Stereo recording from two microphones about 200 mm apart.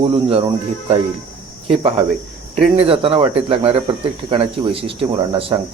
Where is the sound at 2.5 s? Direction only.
30° right (ahead or behind).